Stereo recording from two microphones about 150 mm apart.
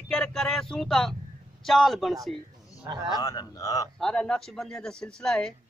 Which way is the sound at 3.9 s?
5° left (ahead or behind).